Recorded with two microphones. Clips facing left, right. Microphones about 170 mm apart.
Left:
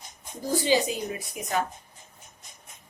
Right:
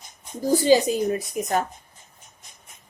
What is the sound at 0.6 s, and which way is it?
A woman's voice, 45° right (ahead or behind).